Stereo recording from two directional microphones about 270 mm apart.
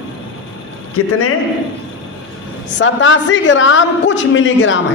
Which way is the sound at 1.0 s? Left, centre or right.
Left.